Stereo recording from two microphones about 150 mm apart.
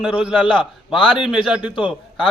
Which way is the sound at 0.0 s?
5° right (ahead or behind).